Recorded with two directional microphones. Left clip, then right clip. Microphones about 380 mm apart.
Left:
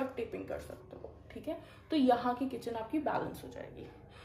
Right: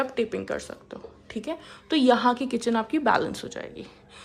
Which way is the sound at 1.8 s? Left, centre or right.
Right.